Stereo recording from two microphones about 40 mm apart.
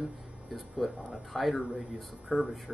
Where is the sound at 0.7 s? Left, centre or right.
Left.